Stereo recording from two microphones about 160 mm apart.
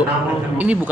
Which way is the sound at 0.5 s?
10° right (ahead or behind).